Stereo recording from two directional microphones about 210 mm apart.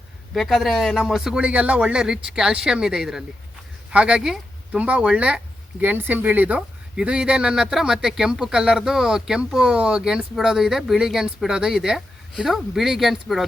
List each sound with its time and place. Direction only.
0.3 s speech: centre (ahead or behind)